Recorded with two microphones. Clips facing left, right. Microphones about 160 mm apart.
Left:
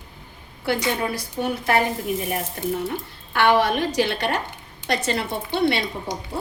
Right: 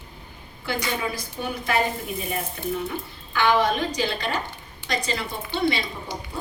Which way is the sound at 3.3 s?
70° left (ahead or behind).